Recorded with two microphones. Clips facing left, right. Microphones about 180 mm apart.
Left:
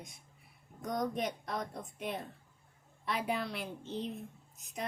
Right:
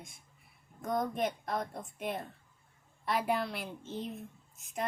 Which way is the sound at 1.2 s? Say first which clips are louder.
Right 3 dB; centre (ahead or behind).